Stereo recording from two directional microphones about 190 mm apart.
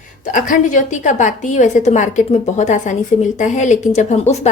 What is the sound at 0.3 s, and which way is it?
A woman's voice, 45° left (ahead or behind).